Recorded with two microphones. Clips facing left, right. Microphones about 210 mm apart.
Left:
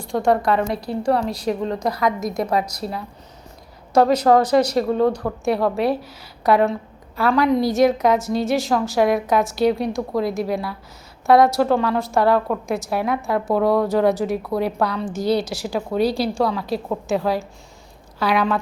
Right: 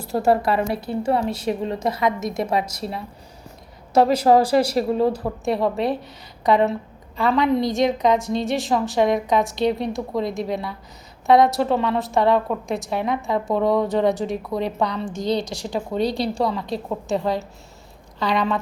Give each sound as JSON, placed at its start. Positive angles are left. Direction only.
{"t": 0.0, "sound": "a woman's voice", "side_deg": -5}
{"t": 1.7, "sound": "speech", "side_deg": -25}
{"t": 4.0, "sound": "speech", "side_deg": -25}
{"t": 5.5, "sound": "a woman's voice", "side_deg": 0}